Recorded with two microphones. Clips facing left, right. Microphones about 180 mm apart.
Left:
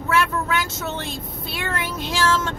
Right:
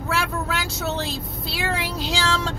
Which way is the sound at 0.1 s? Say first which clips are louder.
Left 4 dB; 75° right (ahead or behind).